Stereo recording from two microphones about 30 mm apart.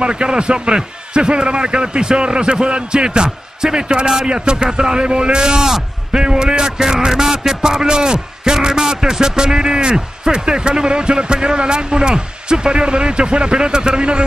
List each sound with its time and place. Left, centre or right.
0.0 s a man's voice: right
4.6 s speech: right